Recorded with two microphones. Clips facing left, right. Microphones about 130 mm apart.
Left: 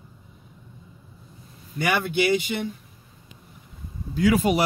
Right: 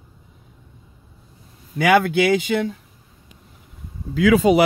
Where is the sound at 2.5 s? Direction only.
90° right.